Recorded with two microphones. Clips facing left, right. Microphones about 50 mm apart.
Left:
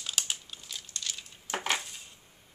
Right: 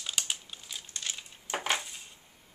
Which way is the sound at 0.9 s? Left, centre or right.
Right.